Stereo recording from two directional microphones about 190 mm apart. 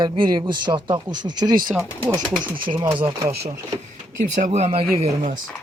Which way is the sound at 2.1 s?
10° right (ahead or behind).